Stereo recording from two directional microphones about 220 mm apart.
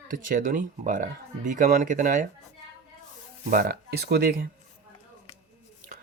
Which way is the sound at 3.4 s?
40° right (ahead or behind).